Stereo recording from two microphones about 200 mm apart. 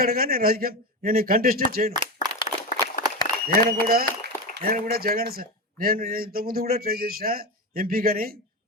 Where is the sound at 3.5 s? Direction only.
45° right (ahead or behind).